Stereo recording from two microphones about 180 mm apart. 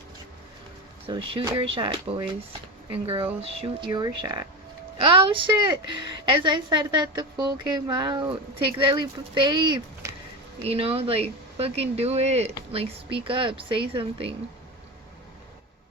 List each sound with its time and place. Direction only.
1.0 s a woman's voice: 30° right (ahead or behind)